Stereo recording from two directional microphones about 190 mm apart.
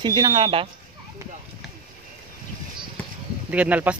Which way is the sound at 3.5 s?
5° right (ahead or behind).